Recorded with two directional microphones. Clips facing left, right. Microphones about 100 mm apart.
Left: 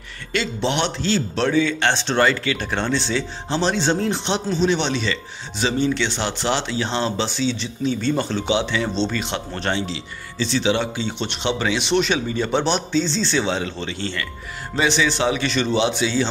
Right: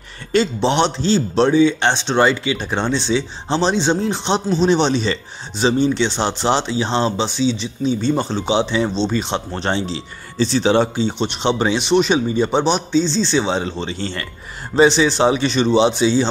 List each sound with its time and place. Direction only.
0.3 s speech: 30° right (ahead or behind)